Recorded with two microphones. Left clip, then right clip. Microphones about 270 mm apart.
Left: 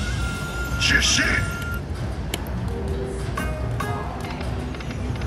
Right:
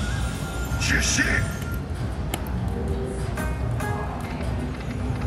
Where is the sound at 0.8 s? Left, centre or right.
Centre.